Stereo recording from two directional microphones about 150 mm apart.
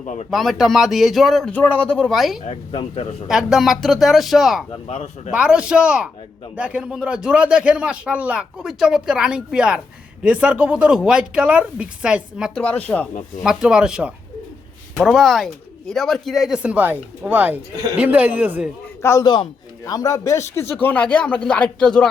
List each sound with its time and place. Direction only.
0.0 s speech: 55° left (ahead or behind)
0.3 s a man's voice: centre (ahead or behind)
2.4 s speech: 45° left (ahead or behind)
3.2 s a man's voice: 5° right (ahead or behind)
4.7 s speech: 40° left (ahead or behind)
5.3 s a man's voice: 5° right (ahead or behind)
12.5 s speech: 10° left (ahead or behind)
13.4 s a man's voice: 5° right (ahead or behind)
19.0 s a man's voice: 20° left (ahead or behind); by 22.1 s 5° left (ahead or behind)